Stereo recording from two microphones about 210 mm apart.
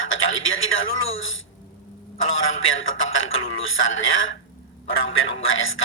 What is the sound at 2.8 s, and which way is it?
A man's voice, 70° left (ahead or behind).